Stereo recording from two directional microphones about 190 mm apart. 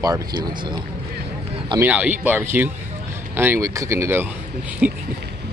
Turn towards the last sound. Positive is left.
turn(degrees=-5)  # may be behind; listen again after turning